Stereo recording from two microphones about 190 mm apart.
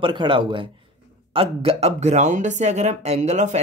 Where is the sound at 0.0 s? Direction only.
25° right (ahead or behind).